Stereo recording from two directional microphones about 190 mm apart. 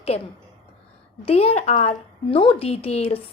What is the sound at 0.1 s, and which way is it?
Speech, 30° left (ahead or behind).